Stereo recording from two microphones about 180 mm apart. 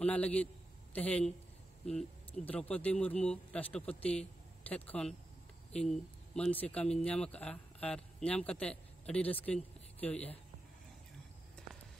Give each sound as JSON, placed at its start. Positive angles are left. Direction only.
{"t": 0.0, "sound": "speech", "side_deg": 10}
{"t": 10.1, "sound": "speech", "side_deg": 35}